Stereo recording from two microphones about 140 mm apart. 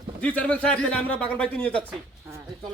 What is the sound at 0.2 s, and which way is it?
A man's voice, 10° left (ahead or behind).